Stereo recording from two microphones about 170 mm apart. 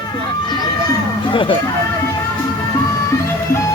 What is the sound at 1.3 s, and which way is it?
Speech, 30° left (ahead or behind).